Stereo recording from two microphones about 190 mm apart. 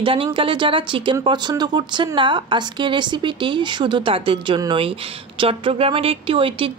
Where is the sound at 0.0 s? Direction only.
25° right (ahead or behind).